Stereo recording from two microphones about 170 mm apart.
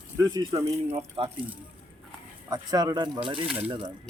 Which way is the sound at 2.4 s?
25° right (ahead or behind).